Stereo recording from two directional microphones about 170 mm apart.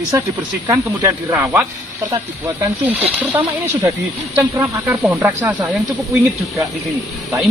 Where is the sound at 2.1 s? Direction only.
30° right (ahead or behind).